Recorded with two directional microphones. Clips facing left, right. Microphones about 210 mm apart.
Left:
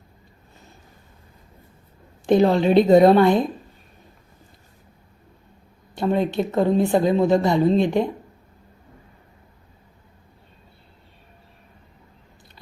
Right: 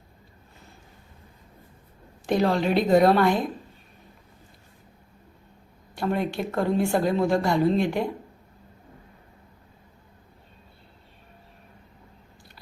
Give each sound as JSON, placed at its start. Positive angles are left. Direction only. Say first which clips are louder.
{"t": 2.2, "sound": "speech", "louder": "left 6 dB", "side_deg": 25}
{"t": 5.9, "sound": "speech", "louder": "left 5 dB", "side_deg": 20}